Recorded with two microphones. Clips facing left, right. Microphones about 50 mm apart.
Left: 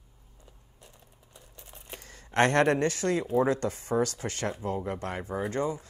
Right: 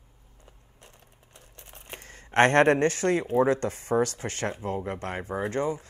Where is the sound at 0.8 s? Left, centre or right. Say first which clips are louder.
Right 1 dB; right.